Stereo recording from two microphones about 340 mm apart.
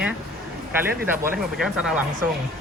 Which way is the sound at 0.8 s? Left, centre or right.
Centre.